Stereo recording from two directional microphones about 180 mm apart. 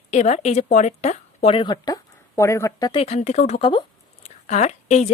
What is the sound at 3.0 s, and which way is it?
Speech, 35° left (ahead or behind).